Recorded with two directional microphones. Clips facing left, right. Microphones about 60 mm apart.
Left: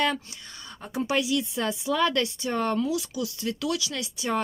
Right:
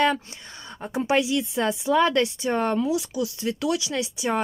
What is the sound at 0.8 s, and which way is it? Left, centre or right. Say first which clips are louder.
Speech: right 4 dB; right.